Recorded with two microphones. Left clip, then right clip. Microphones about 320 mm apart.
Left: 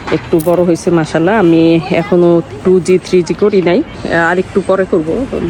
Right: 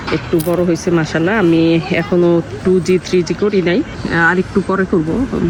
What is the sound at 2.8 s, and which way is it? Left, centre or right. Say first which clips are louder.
Speech: left 4 dB; centre.